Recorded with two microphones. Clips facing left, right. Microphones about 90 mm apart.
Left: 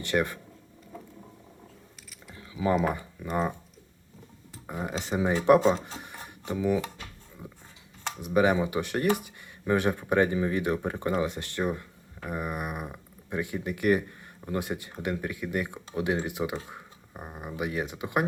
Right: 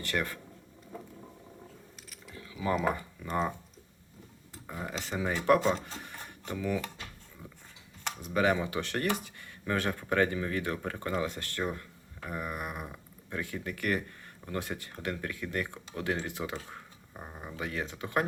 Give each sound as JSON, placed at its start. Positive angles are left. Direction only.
{"t": 0.0, "sound": "speech", "side_deg": 20}
{"t": 2.3, "sound": "a sound", "side_deg": 25}
{"t": 2.9, "sound": "speech", "side_deg": 15}
{"t": 4.6, "sound": "speech", "side_deg": 20}
{"t": 8.2, "sound": "speech", "side_deg": 15}